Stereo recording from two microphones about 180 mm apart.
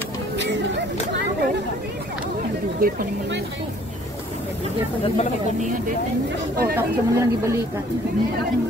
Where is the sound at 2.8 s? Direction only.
55° right (ahead or behind).